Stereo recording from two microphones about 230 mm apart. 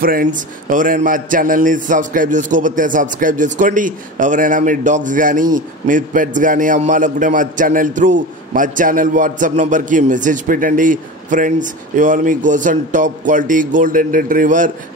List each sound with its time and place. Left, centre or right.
0.0 s a man's voice: right